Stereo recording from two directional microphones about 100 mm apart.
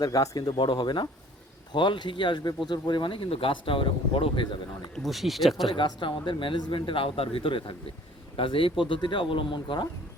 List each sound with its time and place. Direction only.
0.0 s speech: 40° left (ahead or behind)
0.5 s speech: 50° left (ahead or behind)
4.9 s speech: centre (ahead or behind)
5.6 s speech: 55° left (ahead or behind)